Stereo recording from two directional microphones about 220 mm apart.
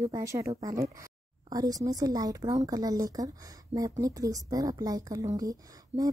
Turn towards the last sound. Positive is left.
turn(degrees=-15)  # may be behind; listen again after turning